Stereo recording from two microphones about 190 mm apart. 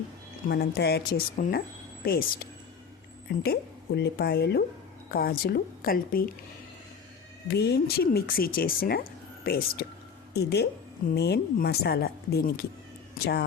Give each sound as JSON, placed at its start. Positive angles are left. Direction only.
{"t": 0.4, "sound": "a woman's voice", "side_deg": 60}
{"t": 7.5, "sound": "a woman's voice", "side_deg": 60}